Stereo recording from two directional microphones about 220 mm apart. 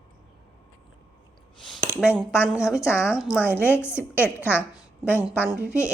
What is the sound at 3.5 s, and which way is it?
A woman's voice, 10° left (ahead or behind).